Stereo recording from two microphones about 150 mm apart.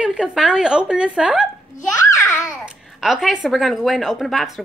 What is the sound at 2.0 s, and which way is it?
Babbling, 20° left (ahead or behind).